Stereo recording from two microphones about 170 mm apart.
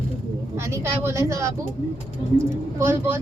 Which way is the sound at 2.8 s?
15° right (ahead or behind).